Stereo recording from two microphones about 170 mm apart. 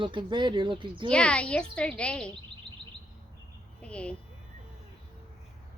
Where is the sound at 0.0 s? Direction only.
30° right (ahead or behind).